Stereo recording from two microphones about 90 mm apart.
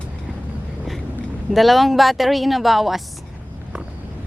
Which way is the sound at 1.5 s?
Centre (ahead or behind).